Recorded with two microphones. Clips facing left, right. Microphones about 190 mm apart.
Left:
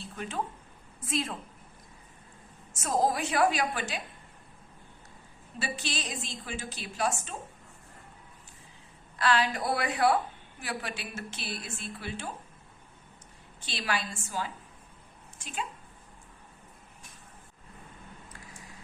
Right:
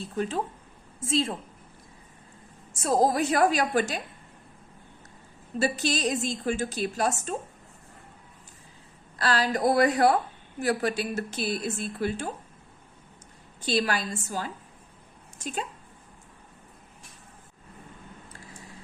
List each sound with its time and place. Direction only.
0.0 s a woman's voice: 35° right (ahead or behind)
2.7 s a woman's voice: 35° right (ahead or behind)
5.5 s a woman's voice: 40° right (ahead or behind)
9.1 s a woman's voice: 40° right (ahead or behind)
13.7 s a woman's voice: 40° right (ahead or behind)